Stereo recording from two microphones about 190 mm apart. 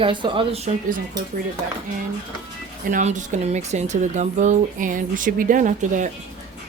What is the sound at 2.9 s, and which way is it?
Speech, 40° right (ahead or behind).